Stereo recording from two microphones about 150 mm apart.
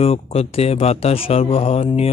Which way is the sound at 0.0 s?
40° left (ahead or behind).